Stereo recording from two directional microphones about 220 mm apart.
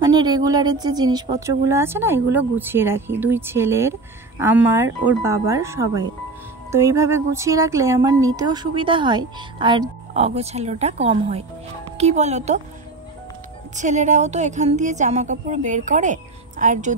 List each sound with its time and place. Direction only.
0.0 s a woman's voice: 20° right (ahead or behind)
13.7 s a woman's voice: 35° right (ahead or behind)